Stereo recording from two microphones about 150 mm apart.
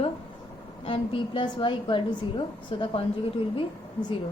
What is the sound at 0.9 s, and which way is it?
A woman's voice, 35° left (ahead or behind).